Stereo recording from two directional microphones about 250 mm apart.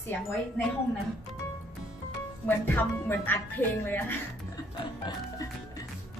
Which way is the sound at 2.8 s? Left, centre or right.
Centre.